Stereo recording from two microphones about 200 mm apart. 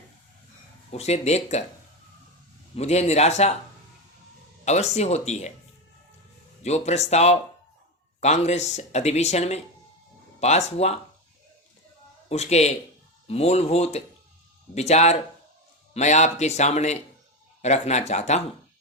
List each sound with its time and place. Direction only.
0.9 s speech: 35° left (ahead or behind)
2.7 s speech: 35° left (ahead or behind)
4.6 s speech: 35° left (ahead or behind)
6.6 s speech: 35° left (ahead or behind)
10.7 s speech: 30° left (ahead or behind)
12.3 s speech: 35° left (ahead or behind)